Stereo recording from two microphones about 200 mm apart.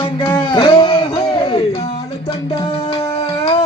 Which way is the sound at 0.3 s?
25° left (ahead or behind).